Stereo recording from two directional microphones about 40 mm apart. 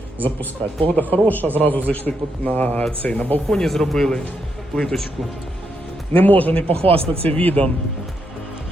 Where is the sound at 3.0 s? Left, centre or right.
Left.